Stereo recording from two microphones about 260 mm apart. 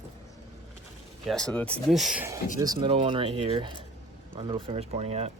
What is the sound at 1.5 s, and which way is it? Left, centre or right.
Speech, centre.